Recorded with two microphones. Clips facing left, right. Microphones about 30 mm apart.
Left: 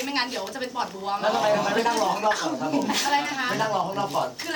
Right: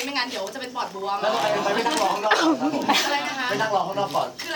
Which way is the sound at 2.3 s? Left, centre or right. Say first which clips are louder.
Right 7 dB; right.